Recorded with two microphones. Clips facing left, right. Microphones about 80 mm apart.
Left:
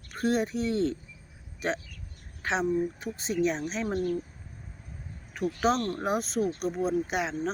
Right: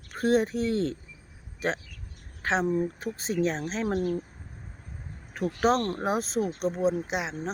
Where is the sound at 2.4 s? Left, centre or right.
Right.